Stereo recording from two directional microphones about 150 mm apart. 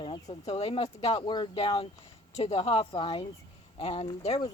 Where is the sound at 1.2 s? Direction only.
30° left (ahead or behind).